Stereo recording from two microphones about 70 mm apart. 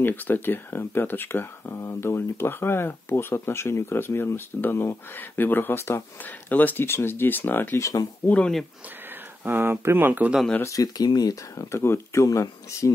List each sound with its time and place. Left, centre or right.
0.0 s speech: left
6.5 s speech: left
7.8 s speech: left
9.4 s speech: right
10.8 s speech: left
11.5 s speech: left